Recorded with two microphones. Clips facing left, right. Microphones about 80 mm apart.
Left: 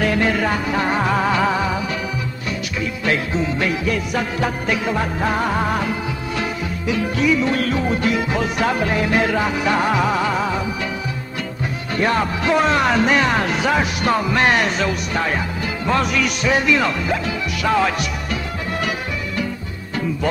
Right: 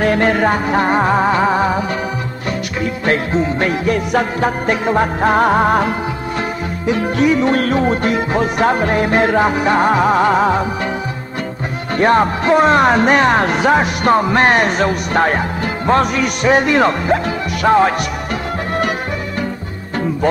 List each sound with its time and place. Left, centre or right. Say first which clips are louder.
0.0 s music: right 5 dB; right
6.9 s music: right 4 dB; right
12.0 s speech: right 6 dB; right
15.9 s music: right 5 dB; right
17.6 s speech: right 6 dB; right